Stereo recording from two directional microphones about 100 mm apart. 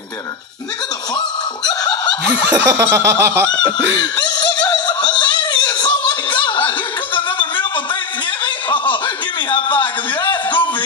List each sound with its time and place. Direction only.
1.1 s snicker: 40° left (ahead or behind)
2.5 s snicker: 30° right (ahead or behind)
4.6 s a sound: 45° left (ahead or behind)
7.2 s music: 55° left (ahead or behind)
8.5 s chuckle: 55° left (ahead or behind)
10.3 s a sound: 55° left (ahead or behind)